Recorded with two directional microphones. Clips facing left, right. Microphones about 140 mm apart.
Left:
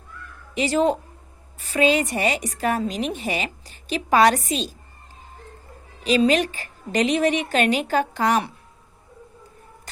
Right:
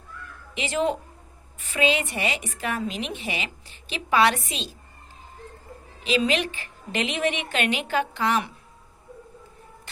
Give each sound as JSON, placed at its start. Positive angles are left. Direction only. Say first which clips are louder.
{"t": 0.5, "sound": "a woman's voice", "louder": "left 5 dB", "side_deg": 40}
{"t": 6.0, "sound": "a woman's voice", "louder": "left 5 dB", "side_deg": 40}